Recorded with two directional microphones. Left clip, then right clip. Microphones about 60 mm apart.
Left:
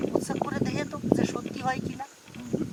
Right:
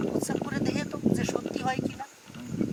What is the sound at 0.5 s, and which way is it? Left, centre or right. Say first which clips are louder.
Speech: even; right.